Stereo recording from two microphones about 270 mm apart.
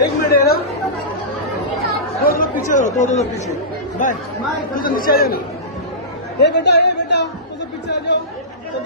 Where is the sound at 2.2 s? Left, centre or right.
Left.